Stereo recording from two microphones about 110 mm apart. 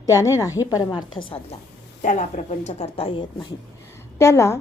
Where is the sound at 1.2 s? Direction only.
50° left (ahead or behind).